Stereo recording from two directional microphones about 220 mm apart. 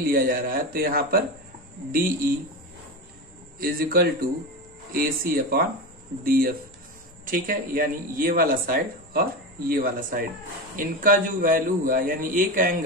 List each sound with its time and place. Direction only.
0.0 s speech: 40° right (ahead or behind)
3.5 s a man's voice: 40° right (ahead or behind)